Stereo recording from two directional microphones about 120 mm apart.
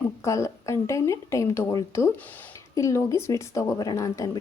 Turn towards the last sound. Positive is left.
turn(degrees=25)  # may be behind; listen again after turning